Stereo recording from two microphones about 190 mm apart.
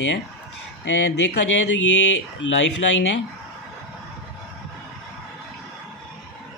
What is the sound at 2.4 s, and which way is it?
Speech, 75° left (ahead or behind).